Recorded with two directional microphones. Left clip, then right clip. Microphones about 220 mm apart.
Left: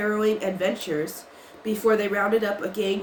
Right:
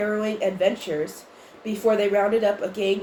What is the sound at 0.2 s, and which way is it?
Speech, 45° left (ahead or behind).